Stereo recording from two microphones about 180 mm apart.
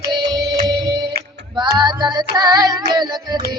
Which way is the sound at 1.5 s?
25° right (ahead or behind).